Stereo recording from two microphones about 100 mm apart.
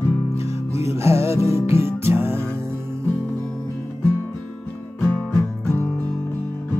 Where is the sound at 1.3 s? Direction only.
90° left.